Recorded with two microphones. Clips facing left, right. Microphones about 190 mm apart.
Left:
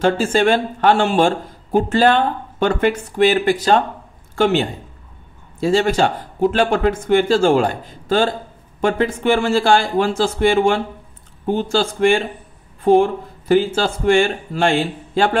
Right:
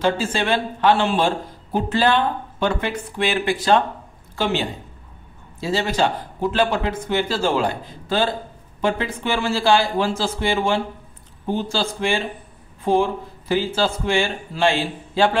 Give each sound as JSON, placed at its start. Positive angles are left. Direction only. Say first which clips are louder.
{"t": 0.0, "sound": "speech", "louder": "left 6 dB", "side_deg": 50}
{"t": 4.4, "sound": "speech", "louder": "left 6 dB", "side_deg": 55}